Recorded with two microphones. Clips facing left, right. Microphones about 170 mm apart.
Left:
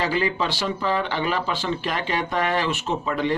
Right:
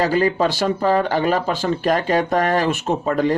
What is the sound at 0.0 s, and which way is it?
Speech, 45° right (ahead or behind).